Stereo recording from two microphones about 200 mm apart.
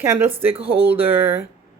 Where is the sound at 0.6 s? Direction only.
30° right (ahead or behind).